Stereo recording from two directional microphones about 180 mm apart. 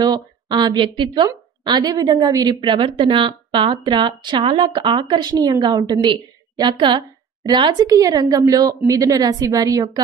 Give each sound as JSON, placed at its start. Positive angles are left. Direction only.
{"t": 0.0, "sound": "a woman's voice", "side_deg": -25}